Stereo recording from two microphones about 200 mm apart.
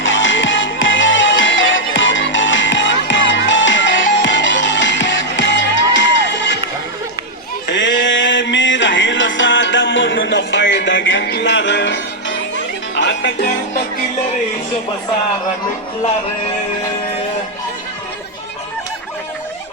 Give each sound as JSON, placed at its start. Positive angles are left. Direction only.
{"t": 0.0, "sound": "music", "side_deg": 70}
{"t": 7.7, "sound": "music", "side_deg": 65}
{"t": 13.0, "sound": "music", "side_deg": 55}